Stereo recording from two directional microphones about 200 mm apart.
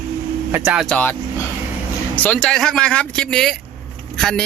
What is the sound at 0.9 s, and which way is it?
Speech, 10° left (ahead or behind).